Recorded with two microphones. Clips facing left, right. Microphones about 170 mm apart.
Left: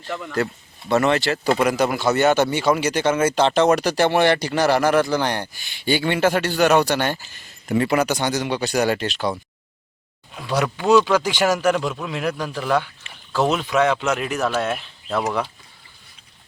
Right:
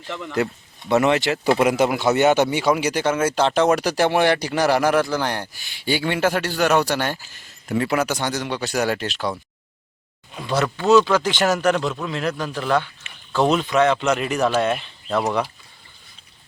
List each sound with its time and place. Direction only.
0.4 s speech: 15° right (ahead or behind)
10.3 s speech: 5° left (ahead or behind)